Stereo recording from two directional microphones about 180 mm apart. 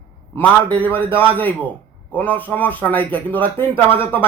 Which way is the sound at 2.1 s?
10° left (ahead or behind).